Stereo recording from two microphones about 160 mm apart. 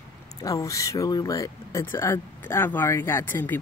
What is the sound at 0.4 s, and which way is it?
Speech, 20° left (ahead or behind).